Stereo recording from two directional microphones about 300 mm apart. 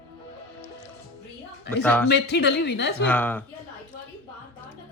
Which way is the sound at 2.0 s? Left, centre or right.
Left.